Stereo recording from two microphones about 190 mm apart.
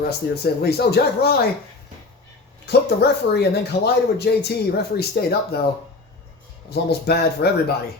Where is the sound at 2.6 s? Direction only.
60° left (ahead or behind).